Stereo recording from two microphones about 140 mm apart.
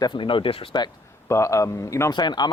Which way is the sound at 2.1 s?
30° left (ahead or behind).